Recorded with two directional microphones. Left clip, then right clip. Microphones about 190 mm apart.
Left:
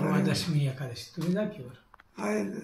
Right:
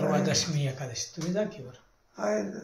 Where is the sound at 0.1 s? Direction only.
35° right (ahead or behind).